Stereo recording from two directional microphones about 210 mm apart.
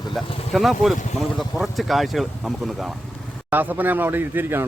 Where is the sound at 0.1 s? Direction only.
Centre (ahead or behind).